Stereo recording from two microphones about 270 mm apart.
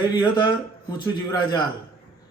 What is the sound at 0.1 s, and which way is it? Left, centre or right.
A man's voice, centre.